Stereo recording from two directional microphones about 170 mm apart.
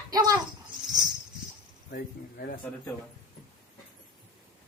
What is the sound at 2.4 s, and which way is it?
Speech, 55° left (ahead or behind).